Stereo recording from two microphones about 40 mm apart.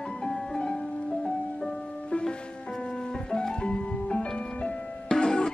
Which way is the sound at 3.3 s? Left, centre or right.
Left.